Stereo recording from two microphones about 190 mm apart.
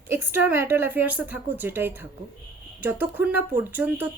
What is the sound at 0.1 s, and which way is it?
A woman's voice, 10° right (ahead or behind).